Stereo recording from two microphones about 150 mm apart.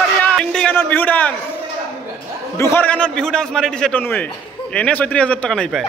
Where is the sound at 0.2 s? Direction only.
5° left (ahead or behind).